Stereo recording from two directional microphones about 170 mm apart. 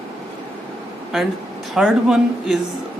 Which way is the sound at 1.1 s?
Centre (ahead or behind).